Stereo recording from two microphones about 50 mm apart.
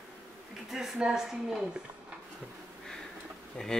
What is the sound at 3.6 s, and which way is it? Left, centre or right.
Speech, centre.